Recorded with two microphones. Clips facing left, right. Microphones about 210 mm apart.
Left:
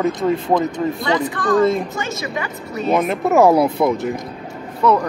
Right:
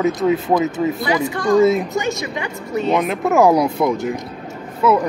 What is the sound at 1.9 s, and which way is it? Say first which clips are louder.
Speech: right 3 dB; 15° right (ahead or behind).